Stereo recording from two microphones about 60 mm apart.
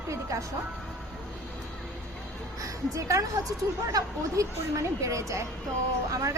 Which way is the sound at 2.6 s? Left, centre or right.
Right.